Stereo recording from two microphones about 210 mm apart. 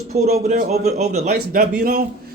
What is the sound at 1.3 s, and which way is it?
Speech, 50° right (ahead or behind).